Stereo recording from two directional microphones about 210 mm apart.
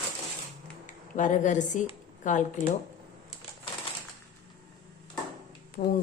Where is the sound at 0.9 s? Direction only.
35° left (ahead or behind).